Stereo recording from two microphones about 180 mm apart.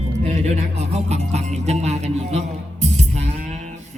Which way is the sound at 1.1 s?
40° right (ahead or behind).